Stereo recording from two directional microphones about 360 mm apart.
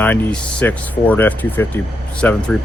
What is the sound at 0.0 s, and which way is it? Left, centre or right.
Speech, centre.